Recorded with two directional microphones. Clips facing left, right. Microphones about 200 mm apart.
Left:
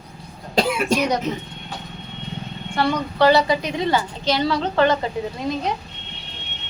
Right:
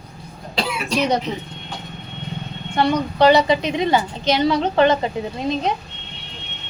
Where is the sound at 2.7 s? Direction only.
20° right (ahead or behind).